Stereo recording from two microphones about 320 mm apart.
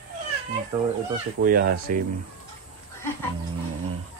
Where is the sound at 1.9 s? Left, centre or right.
Right.